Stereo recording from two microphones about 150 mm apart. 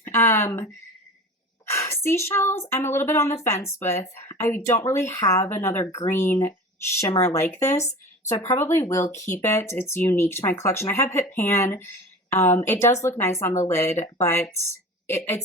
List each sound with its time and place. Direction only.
0.0 s speech: 15° left (ahead or behind)
1.6 s a sound: 20° left (ahead or behind)
2.0 s speech: 15° left (ahead or behind)